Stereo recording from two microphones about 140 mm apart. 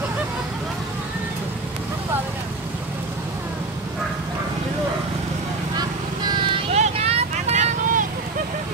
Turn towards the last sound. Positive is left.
turn(degrees=-65)  # may be behind; listen again after turning